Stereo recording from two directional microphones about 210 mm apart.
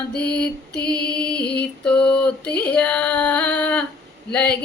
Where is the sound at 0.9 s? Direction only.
5° left (ahead or behind).